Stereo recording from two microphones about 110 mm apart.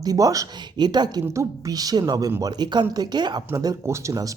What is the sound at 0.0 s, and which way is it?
Speech, 35° right (ahead or behind).